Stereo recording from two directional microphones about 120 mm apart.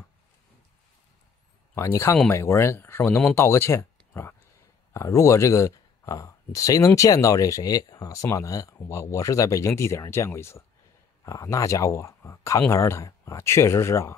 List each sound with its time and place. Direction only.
1.8 s speech: 25° left (ahead or behind)
4.1 s a sound: 20° left (ahead or behind)
4.9 s speech: 25° left (ahead or behind)